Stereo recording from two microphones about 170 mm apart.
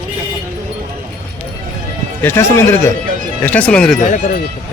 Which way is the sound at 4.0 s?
45° left (ahead or behind).